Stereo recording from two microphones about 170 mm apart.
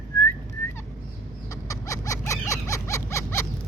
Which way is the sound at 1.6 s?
20° left (ahead or behind).